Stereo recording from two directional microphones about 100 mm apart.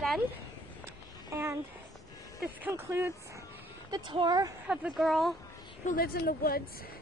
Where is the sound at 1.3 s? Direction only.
25° right (ahead or behind).